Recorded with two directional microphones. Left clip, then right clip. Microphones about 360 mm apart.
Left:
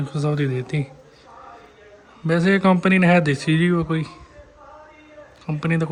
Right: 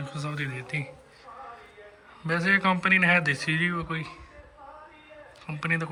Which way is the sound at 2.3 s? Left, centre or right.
Centre.